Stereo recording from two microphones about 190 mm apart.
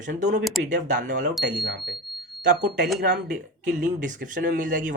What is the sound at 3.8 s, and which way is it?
Speech, 40° right (ahead or behind).